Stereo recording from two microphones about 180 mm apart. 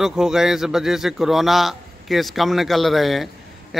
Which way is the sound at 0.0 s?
5° right (ahead or behind).